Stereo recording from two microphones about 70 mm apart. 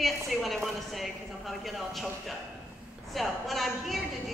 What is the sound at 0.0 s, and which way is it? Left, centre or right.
Speech, centre.